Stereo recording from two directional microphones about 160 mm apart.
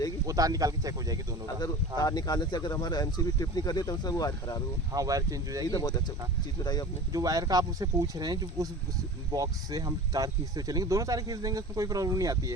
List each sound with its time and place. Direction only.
0.3 s speech: 20° right (ahead or behind)
2.0 s speech: 25° left (ahead or behind)
4.9 s speech: 20° right (ahead or behind)
5.6 s speech: 25° left (ahead or behind)
7.1 s speech: 20° right (ahead or behind)